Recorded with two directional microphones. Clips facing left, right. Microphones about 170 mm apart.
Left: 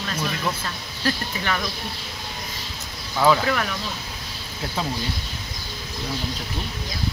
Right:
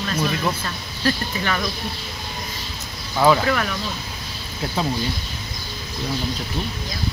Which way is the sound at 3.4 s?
10° left (ahead or behind).